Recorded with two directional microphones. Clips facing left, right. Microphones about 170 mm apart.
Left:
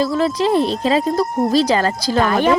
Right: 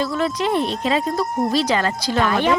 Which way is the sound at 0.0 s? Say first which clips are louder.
Left 4 dB; 35° left (ahead or behind).